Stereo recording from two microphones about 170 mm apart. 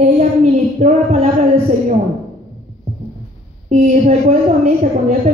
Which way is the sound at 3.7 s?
45° right (ahead or behind).